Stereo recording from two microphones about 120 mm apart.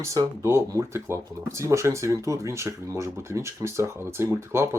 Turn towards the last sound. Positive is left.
turn(degrees=-20)  # may be behind; listen again after turning